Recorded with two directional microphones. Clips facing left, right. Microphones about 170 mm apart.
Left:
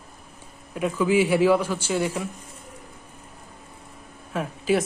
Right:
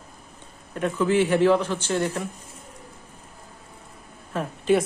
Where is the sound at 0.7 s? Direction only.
5° left (ahead or behind).